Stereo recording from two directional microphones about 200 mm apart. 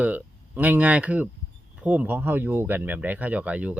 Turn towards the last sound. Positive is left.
turn(degrees=-5)  # may be behind; listen again after turning